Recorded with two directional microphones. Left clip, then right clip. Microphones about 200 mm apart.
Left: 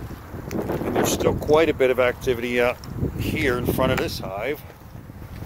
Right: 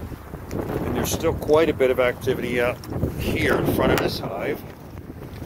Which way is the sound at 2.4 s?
15° left (ahead or behind).